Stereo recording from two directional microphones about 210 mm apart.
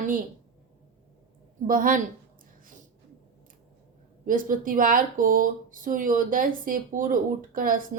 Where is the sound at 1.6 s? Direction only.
40° right (ahead or behind).